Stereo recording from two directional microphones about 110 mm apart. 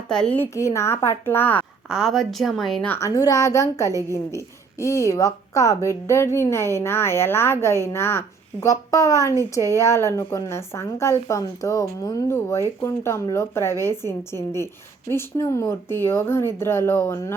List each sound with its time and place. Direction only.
0.1 s a woman's voice: 5° left (ahead or behind)
0.3 s speech: 25° left (ahead or behind)
1.9 s speech: centre (ahead or behind)
2.8 s a woman's voice: 20° left (ahead or behind)
3.1 s speech: 30° left (ahead or behind)